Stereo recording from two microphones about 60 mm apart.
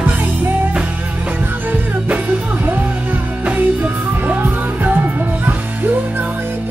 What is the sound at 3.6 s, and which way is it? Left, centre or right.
Music, right.